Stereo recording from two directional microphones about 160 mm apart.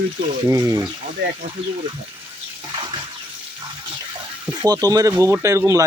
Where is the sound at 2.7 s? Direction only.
30° right (ahead or behind).